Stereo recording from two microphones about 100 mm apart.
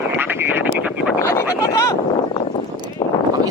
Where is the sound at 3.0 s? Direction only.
50° left (ahead or behind).